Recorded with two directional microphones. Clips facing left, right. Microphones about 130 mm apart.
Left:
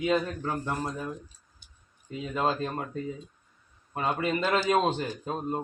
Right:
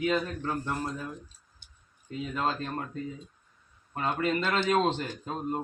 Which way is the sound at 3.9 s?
10° left (ahead or behind).